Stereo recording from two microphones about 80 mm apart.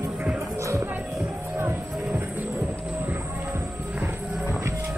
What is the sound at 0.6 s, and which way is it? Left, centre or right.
Music, right.